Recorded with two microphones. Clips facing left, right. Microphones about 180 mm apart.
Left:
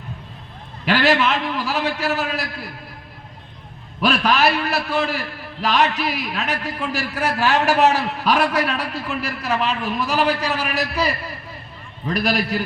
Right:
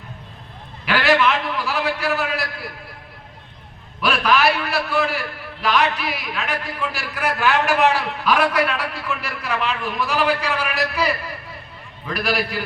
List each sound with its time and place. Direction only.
0.9 s a man's voice: 40° left (ahead or behind)
4.0 s a man's voice: 40° left (ahead or behind)